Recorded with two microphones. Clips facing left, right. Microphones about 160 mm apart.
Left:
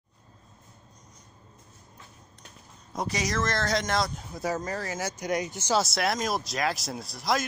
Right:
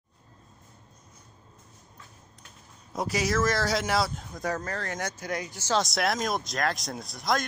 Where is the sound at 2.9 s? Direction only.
5° right (ahead or behind).